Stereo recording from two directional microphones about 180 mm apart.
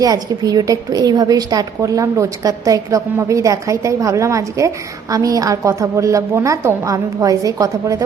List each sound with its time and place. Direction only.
0.0 s a woman's voice: 20° right (ahead or behind)